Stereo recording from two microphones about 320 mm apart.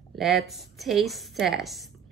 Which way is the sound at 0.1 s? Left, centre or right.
Centre.